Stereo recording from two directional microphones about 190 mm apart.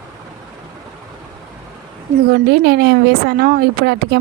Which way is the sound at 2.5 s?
60° right (ahead or behind).